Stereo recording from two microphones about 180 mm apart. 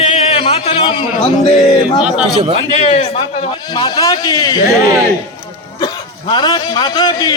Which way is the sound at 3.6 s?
20° left (ahead or behind).